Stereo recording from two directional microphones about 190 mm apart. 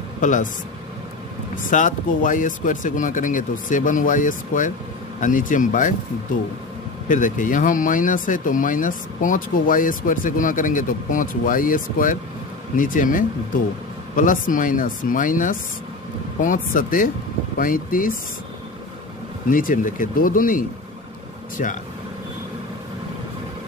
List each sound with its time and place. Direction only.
0.2 s speech: 40° left (ahead or behind)
1.5 s speech: 45° left (ahead or behind)
7.1 s speech: 45° left (ahead or behind)
19.5 s speech: 45° left (ahead or behind)